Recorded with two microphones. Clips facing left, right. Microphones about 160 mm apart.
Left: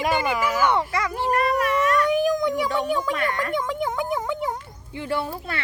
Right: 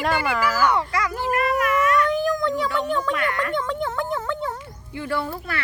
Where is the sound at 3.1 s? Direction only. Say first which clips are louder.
Right 1 dB; 30° left (ahead or behind).